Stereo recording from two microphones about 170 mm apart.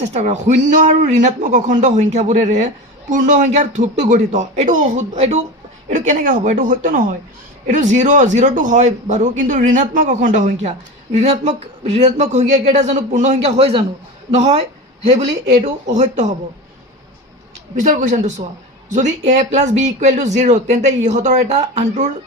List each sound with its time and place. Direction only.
0.1 s speech: 40° right (ahead or behind)
17.7 s speech: 45° right (ahead or behind)